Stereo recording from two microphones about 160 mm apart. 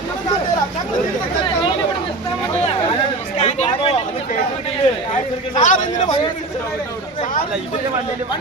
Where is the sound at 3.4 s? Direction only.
45° left (ahead or behind).